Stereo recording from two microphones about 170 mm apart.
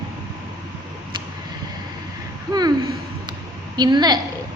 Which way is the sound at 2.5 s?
25° right (ahead or behind).